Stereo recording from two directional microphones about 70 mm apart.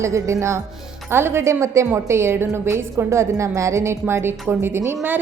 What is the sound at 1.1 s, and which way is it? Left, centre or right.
A woman's voice, right.